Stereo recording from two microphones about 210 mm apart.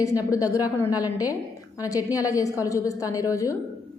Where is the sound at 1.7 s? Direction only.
15° left (ahead or behind).